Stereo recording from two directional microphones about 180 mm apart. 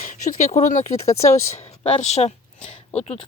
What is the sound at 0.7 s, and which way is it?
Speech, 40° left (ahead or behind).